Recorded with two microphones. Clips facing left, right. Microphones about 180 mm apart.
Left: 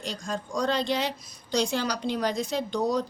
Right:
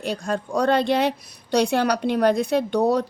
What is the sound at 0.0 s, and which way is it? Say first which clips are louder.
Speech: right 7 dB; 60° right (ahead or behind).